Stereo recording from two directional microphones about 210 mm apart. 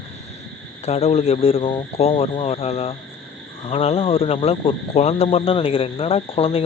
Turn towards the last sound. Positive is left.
turn(degrees=25)  # may be behind; listen again after turning